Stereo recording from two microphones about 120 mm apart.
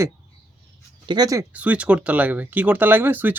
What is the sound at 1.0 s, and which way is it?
Speech, 35° right (ahead or behind).